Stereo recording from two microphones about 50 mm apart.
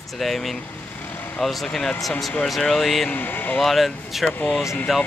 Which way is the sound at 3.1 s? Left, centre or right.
Left.